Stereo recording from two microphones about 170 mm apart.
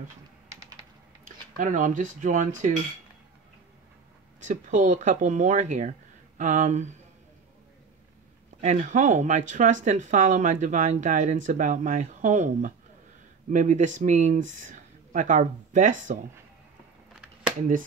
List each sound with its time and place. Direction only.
1.2 s speech: 50° right (ahead or behind)
4.4 s speech: 45° right (ahead or behind)
8.5 s speech: 45° right (ahead or behind)
17.1 s a sound: 5° right (ahead or behind)